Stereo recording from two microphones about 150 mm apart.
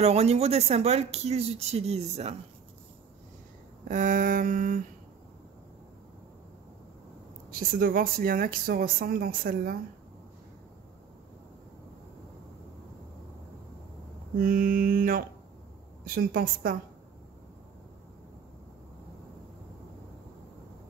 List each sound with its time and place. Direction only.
0.0 s speech: 45° right (ahead or behind)
3.9 s a sound: 60° right (ahead or behind)
7.8 s speech: 75° right (ahead or behind)
14.4 s a woman's voice: 75° right (ahead or behind)